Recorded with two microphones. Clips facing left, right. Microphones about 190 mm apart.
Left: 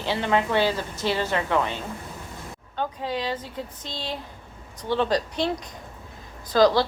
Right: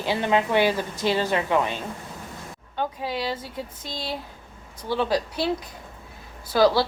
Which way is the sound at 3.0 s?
10° right (ahead or behind).